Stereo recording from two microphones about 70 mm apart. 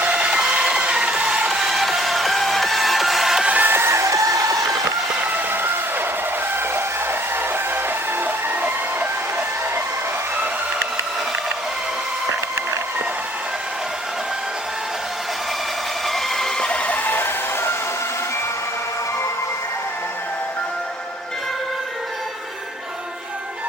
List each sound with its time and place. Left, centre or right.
0.0 s music: centre
3.4 s chicken: right
5.5 s vehicle: right
6.7 s music: right
16.0 s a sound: centre; by 17.7 s left